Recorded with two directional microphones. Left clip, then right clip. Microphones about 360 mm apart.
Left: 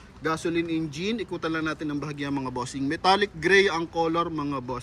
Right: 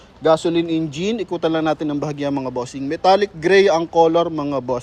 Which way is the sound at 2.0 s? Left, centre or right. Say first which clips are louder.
Right 8 dB; centre.